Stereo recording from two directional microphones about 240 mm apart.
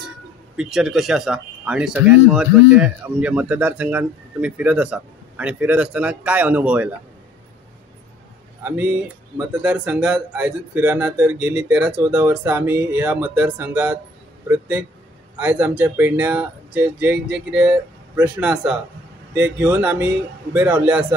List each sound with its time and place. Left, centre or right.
0.6 s speech: centre
8.6 s a man's voice: centre